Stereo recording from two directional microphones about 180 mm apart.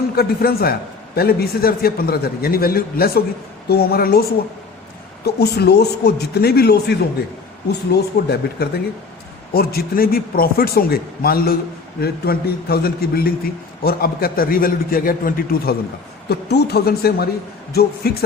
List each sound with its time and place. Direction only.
0.2 s a man's voice: 60° left (ahead or behind)
7.9 s a man's voice: 65° left (ahead or behind)
16.3 s a man's voice: 65° left (ahead or behind)